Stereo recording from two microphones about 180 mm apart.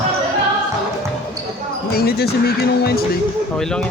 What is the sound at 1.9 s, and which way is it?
Speech, 60° left (ahead or behind).